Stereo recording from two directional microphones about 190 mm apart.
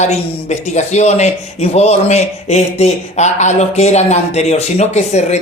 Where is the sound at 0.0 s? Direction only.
35° left (ahead or behind).